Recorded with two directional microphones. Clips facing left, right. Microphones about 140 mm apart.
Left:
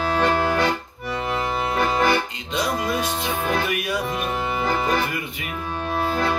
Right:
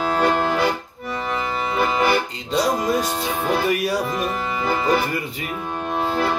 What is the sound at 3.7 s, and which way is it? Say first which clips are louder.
Music: right 4 dB; 35° right (ahead or behind).